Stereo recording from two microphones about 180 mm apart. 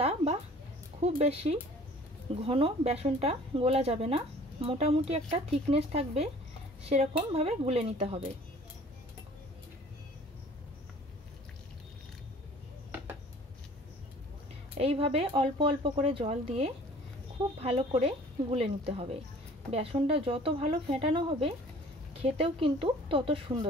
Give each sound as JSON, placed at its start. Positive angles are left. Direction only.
{"t": 0.0, "sound": "a sound", "side_deg": -35}
{"t": 1.0, "sound": "speech", "side_deg": -35}
{"t": 14.8, "sound": "speech", "side_deg": -35}